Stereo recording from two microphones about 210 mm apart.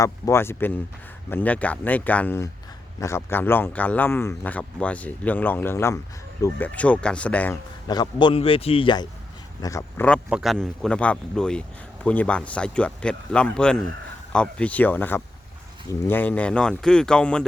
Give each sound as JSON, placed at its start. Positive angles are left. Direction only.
{"t": 0.0, "sound": "speech", "side_deg": 15}
{"t": 7.9, "sound": "a man's voice", "side_deg": 20}
{"t": 10.2, "sound": "speech", "side_deg": 0}